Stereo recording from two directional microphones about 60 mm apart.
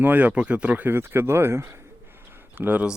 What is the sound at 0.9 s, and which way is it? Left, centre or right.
Speech, right.